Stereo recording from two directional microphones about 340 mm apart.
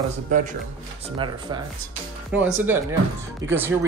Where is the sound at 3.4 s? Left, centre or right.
Right.